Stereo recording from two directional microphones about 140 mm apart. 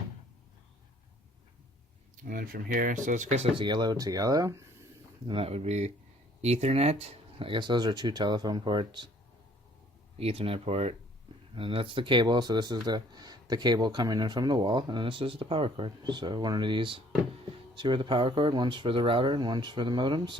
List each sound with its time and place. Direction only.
2.2 s speech: 90° right; by 4.6 s 25° right (ahead or behind)
5.3 s speech: 45° right (ahead or behind)
10.2 s speech: 45° right (ahead or behind)